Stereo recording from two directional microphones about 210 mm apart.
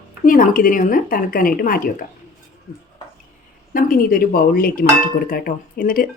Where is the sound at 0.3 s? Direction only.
40° left (ahead or behind).